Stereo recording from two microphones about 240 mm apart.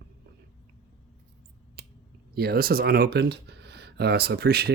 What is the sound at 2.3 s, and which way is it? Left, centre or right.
Speech, right.